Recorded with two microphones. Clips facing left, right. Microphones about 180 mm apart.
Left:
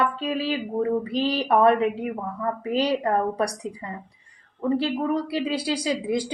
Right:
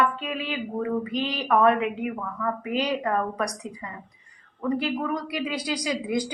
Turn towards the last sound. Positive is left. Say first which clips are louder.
# left 2 dB
turn(degrees=30)  # may be behind; listen again after turning